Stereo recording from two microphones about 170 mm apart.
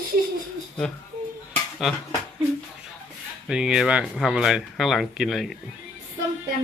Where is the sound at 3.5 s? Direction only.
5° right (ahead or behind).